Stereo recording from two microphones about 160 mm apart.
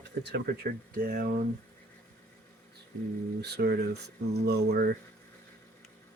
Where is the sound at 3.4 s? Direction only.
90° right.